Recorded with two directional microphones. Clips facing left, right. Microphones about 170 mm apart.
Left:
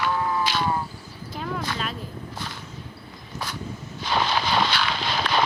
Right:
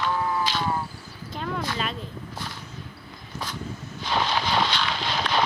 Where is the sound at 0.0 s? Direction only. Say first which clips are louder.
Left 1 dB; 70° left (ahead or behind).